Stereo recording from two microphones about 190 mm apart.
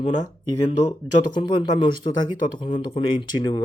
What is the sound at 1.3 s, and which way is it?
A man's voice, 25° left (ahead or behind).